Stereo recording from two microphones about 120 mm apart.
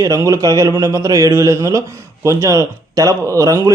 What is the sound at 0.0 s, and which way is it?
Speech, 25° right (ahead or behind).